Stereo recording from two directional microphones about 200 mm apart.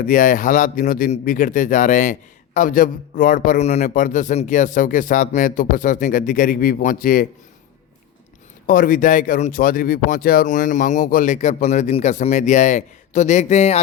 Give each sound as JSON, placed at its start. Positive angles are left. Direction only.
{"t": 0.0, "sound": "a man's voice", "side_deg": 40}
{"t": 8.6, "sound": "a man's voice", "side_deg": 45}